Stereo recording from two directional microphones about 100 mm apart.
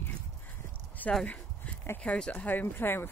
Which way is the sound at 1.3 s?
20° left (ahead or behind).